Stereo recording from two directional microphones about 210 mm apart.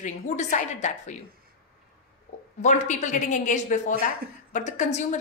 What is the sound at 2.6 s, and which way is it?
A woman's voice, 35° left (ahead or behind).